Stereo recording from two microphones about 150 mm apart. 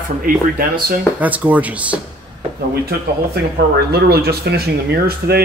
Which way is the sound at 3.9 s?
90° right.